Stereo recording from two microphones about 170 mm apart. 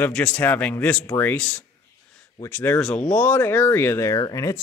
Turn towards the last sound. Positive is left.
turn(degrees=20)  # may be behind; listen again after turning